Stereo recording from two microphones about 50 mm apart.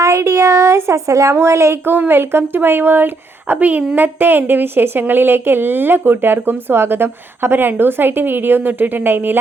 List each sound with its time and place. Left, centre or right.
0.0 s speech: right
1.4 s speech: right
1.8 s a woman's voice: right